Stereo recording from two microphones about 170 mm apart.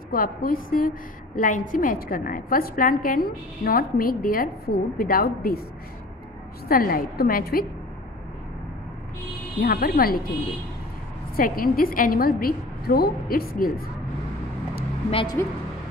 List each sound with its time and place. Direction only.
0.1 s a woman's voice: 55° left (ahead or behind)
6.7 s a woman's voice: 55° left (ahead or behind)
9.6 s a woman's voice: 60° left (ahead or behind)
11.3 s a woman's voice: 55° left (ahead or behind)
15.4 s speech: 15° left (ahead or behind)